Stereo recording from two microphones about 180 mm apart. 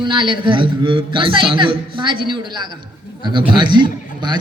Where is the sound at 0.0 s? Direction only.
25° right (ahead or behind).